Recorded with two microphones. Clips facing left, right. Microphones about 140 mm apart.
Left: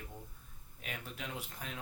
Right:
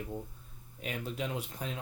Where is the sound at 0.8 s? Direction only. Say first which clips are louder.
Right 8 dB; 25° right (ahead or behind).